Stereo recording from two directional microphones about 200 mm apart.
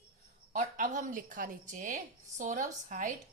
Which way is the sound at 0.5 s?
40° right (ahead or behind).